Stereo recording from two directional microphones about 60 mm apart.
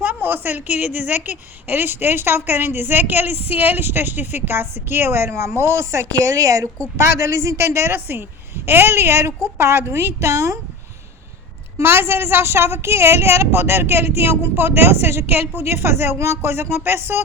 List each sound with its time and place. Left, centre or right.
0.0 s a woman's voice: right
6.1 s a woman's voice: right
6.9 s a woman's voice: right
11.8 s a woman's voice: right